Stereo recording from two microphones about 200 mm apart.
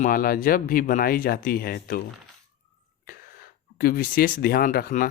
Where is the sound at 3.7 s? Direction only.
45° left (ahead or behind).